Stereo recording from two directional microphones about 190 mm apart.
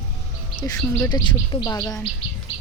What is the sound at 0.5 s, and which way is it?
Speech, 20° left (ahead or behind).